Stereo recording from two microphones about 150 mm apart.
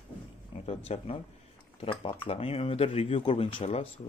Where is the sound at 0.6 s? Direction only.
45° left (ahead or behind).